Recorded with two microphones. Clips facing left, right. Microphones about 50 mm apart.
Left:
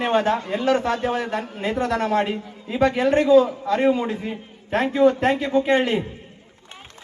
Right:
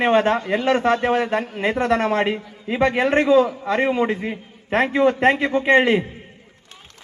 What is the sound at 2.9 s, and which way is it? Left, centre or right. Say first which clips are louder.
Speech: left 1 dB; right.